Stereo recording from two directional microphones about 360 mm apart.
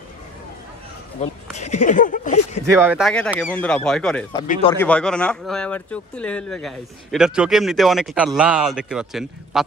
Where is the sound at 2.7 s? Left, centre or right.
Centre.